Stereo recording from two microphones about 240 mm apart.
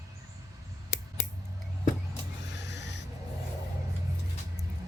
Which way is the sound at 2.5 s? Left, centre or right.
Left.